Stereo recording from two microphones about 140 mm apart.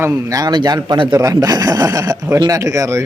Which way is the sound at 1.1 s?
20° right (ahead or behind).